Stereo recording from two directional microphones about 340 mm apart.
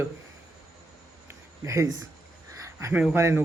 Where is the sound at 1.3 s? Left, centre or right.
Centre.